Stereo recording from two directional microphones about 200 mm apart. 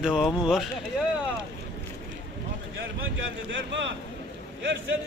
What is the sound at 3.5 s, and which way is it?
Speech, 65° right (ahead or behind).